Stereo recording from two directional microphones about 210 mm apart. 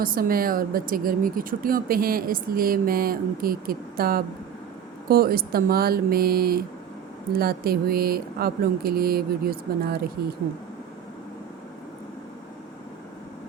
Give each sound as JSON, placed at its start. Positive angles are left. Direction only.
{"t": 0.0, "sound": "speech", "side_deg": -45}